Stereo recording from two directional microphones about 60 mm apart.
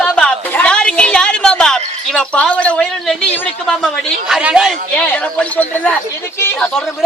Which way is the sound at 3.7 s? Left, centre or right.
Centre.